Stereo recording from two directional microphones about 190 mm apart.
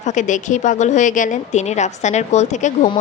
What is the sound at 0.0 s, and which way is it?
A woman's voice, 40° left (ahead or behind).